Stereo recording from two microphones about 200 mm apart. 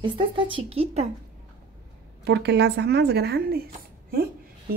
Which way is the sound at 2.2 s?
55° right (ahead or behind).